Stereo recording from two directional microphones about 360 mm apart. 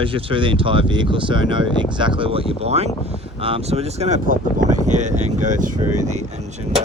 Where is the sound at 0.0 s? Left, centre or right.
Centre.